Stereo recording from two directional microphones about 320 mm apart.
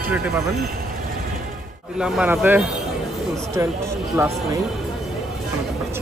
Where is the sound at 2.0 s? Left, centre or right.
Centre.